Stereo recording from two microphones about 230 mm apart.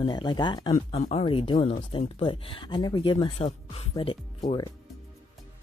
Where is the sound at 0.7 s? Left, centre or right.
Left.